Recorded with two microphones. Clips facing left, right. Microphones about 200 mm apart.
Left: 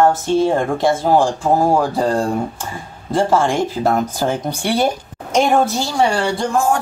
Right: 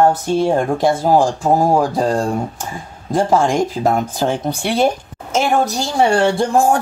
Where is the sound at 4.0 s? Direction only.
Centre (ahead or behind).